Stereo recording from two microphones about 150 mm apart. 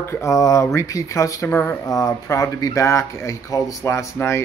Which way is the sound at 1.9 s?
20° left (ahead or behind).